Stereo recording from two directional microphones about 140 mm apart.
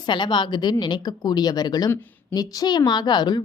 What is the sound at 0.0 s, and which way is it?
A woman's voice, 35° left (ahead or behind).